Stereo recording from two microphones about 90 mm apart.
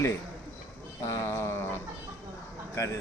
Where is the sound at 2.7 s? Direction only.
30° left (ahead or behind).